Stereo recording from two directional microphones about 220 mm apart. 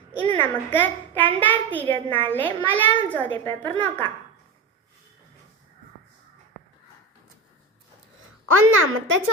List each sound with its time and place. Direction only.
0.3 s a child's voice: 10° left (ahead or behind)
8.4 s a woman's voice: 75° right (ahead or behind)